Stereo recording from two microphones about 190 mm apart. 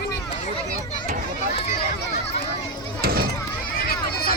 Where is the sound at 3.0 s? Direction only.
55° right (ahead or behind).